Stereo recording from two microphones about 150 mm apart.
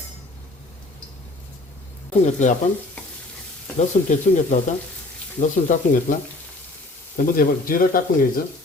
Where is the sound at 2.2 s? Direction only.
55° left (ahead or behind).